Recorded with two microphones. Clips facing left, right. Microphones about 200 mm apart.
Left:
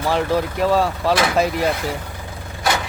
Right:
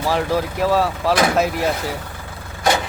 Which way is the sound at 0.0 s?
Centre (ahead or behind).